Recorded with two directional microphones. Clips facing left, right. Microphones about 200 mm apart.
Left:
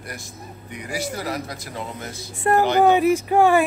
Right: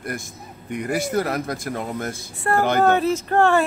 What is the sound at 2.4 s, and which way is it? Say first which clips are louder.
A woman's voice: left 2 dB; 20° left (ahead or behind).